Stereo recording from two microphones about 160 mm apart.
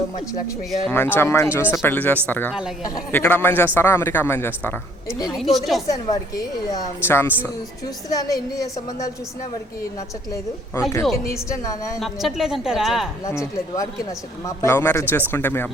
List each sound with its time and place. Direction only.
0.9 s speech: 15° left (ahead or behind)
5.3 s speech: centre (ahead or behind)
5.9 s a woman's voice: 25° left (ahead or behind)
10.8 s a woman's voice: 15° left (ahead or behind)
11.9 s speech: centre (ahead or behind)
13.2 s a woman's voice: 20° left (ahead or behind)